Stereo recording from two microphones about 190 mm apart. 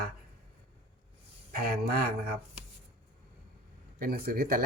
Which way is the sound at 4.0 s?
55° right (ahead or behind).